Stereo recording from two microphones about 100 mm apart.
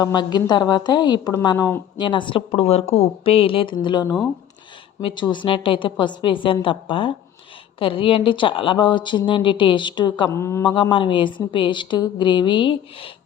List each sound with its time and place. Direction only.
0.0 s a woman's voice: 45° left (ahead or behind)
1.4 s speech: 35° left (ahead or behind)
2.0 s speech: 50° left (ahead or behind)
5.0 s speech: 50° left (ahead or behind)
10.3 s mantra: 30° left (ahead or behind)
10.6 s a woman's voice: 50° left (ahead or behind)